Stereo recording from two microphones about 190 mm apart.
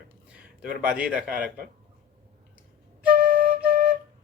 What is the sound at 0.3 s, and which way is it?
Speech, 5° right (ahead or behind).